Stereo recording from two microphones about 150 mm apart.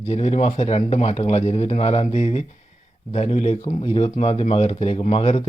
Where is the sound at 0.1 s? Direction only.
45° left (ahead or behind).